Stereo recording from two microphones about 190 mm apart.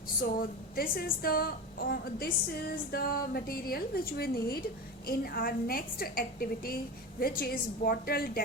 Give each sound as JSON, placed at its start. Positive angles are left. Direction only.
{"t": 0.8, "sound": "a woman's voice", "side_deg": 50}